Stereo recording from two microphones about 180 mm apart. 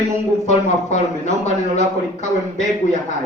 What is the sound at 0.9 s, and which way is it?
Speech, 40° left (ahead or behind).